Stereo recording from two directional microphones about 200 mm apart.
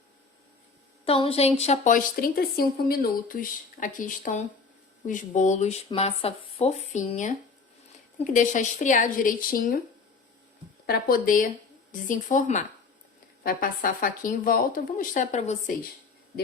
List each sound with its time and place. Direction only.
1.0 s a woman's voice: 30° left (ahead or behind); by 9.8 s 45° left (ahead or behind)
10.8 s a woman's voice: 50° left (ahead or behind)